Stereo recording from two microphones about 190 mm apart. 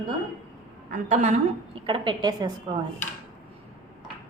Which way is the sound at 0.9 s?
40° right (ahead or behind).